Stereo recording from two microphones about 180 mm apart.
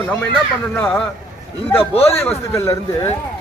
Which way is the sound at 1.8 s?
35° left (ahead or behind).